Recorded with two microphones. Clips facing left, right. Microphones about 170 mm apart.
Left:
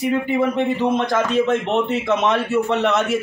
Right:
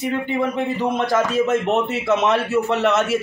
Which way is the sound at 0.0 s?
Centre (ahead or behind).